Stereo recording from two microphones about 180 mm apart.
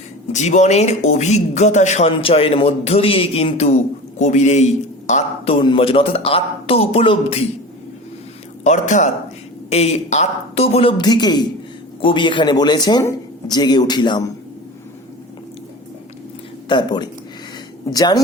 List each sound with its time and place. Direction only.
0.3 s speech: 40° left (ahead or behind)
5.5 s speech: 30° left (ahead or behind)
8.6 s speech: 40° left (ahead or behind); by 14.3 s 25° left (ahead or behind)
16.6 s speech: 25° left (ahead or behind)